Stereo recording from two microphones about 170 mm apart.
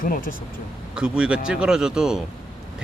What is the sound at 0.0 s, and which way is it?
Speech, 55° left (ahead or behind).